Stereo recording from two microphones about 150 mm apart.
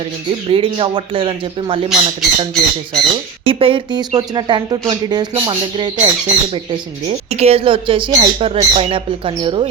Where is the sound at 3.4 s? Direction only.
35° right (ahead or behind).